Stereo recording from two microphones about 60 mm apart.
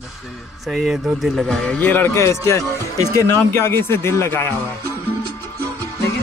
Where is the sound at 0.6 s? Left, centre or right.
Centre.